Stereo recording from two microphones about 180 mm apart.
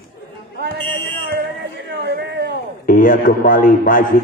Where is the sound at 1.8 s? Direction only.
65° right (ahead or behind).